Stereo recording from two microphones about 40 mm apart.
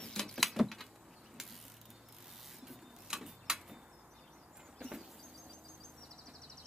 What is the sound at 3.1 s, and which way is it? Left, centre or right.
Tick-tock, centre.